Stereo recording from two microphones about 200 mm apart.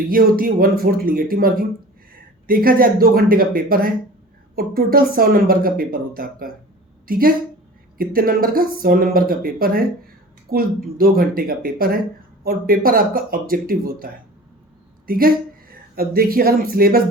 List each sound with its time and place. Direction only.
0.1 s speech: 45° right (ahead or behind)